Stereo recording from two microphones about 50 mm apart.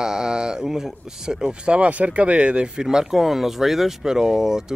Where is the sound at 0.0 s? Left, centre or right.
Centre.